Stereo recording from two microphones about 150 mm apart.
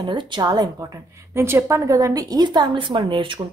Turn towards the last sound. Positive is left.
turn(degrees=-35)  # may be behind; listen again after turning